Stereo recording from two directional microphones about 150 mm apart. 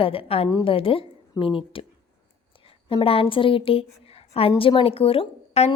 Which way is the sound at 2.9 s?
35° left (ahead or behind).